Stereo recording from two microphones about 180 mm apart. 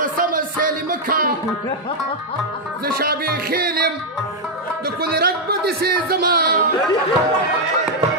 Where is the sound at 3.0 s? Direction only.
55° right (ahead or behind).